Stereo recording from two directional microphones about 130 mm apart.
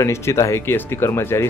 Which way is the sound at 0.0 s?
20° left (ahead or behind).